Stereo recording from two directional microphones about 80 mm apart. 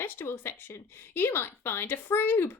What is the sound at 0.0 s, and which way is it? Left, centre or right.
Speech, left.